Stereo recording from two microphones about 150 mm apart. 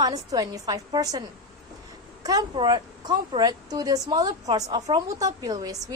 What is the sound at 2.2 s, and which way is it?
Speech, 30° right (ahead or behind).